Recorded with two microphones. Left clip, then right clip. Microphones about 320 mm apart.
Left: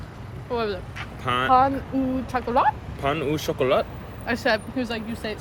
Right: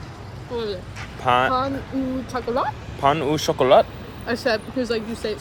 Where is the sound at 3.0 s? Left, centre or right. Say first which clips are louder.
Right 7 dB; centre.